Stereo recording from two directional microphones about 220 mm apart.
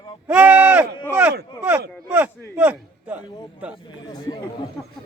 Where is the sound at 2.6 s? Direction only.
5° right (ahead or behind).